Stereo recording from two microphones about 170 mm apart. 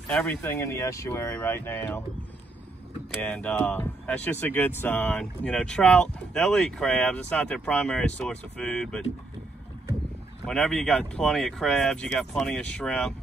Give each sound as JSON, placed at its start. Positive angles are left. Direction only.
{"t": 0.1, "sound": "speech", "side_deg": 10}
{"t": 3.2, "sound": "speech", "side_deg": 10}
{"t": 10.4, "sound": "speech", "side_deg": 5}